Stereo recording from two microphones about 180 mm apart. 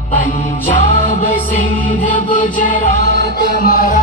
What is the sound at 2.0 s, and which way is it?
Music, 45° left (ahead or behind).